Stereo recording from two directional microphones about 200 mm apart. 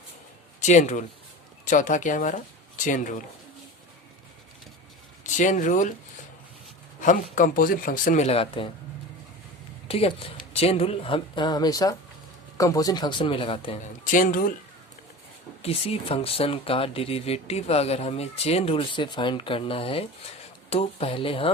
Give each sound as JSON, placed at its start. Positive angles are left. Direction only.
{"t": 0.6, "sound": "speech", "side_deg": 35}
{"t": 5.2, "sound": "speech", "side_deg": 40}
{"t": 7.0, "sound": "speech", "side_deg": 40}
{"t": 9.9, "sound": "speech", "side_deg": 30}
{"t": 14.1, "sound": "speech", "side_deg": 45}
{"t": 15.6, "sound": "speech", "side_deg": 30}